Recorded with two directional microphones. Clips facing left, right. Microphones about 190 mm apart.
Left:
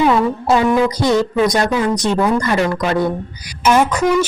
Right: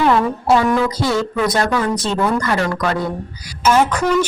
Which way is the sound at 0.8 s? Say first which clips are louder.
Left 3 dB; 20° left (ahead or behind).